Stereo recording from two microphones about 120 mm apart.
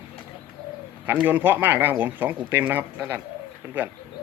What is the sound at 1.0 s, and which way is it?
Speech, 15° right (ahead or behind).